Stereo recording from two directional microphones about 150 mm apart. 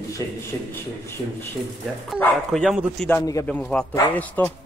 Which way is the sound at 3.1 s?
20° left (ahead or behind).